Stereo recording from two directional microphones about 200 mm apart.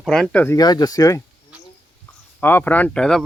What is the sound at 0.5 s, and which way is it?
Speech, 20° left (ahead or behind).